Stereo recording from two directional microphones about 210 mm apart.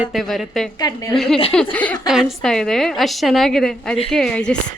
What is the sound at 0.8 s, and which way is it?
Speech, 15° left (ahead or behind).